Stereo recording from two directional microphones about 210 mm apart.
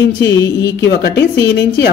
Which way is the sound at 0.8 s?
55° left (ahead or behind).